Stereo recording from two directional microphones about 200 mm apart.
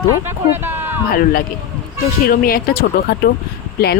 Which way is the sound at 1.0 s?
45° left (ahead or behind).